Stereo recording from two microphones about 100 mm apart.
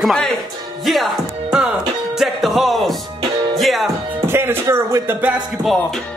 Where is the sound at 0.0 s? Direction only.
5° left (ahead or behind).